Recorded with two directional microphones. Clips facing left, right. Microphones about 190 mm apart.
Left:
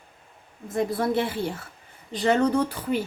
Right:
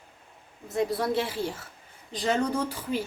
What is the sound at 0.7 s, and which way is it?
A woman's voice, 50° left (ahead or behind).